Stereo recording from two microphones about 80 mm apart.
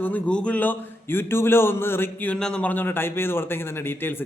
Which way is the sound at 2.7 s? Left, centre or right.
Left.